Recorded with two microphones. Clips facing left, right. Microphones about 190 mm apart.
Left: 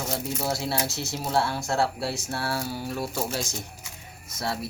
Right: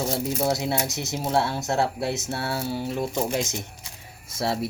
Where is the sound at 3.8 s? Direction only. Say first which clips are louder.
Even; 25° right (ahead or behind).